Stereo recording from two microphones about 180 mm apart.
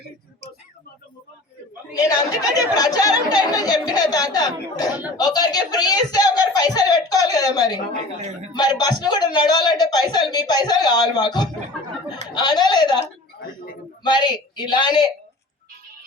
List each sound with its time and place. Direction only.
1.9 s speech: 20° left (ahead or behind)
14.0 s speech: 25° left (ahead or behind)